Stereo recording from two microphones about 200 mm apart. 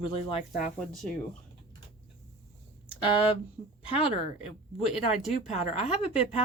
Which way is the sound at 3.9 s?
30° left (ahead or behind).